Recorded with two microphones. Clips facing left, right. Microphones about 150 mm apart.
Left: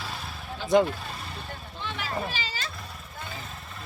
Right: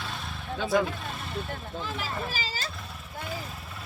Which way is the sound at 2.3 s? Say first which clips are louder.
Even; 35° right (ahead or behind).